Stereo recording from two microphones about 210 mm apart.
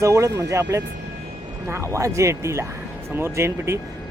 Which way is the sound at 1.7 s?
15° right (ahead or behind).